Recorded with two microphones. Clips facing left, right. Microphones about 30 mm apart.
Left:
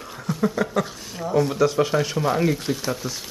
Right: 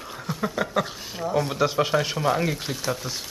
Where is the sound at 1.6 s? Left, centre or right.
Centre.